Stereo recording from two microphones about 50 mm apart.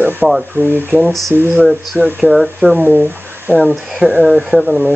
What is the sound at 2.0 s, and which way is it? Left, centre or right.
Speech, right.